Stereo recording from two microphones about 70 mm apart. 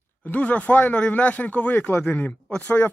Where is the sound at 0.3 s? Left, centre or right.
Left.